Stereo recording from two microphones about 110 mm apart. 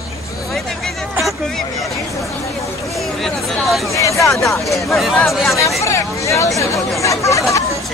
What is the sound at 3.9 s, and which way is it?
Speech, 30° left (ahead or behind).